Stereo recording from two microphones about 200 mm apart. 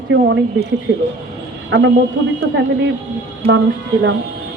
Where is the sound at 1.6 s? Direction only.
60° right (ahead or behind).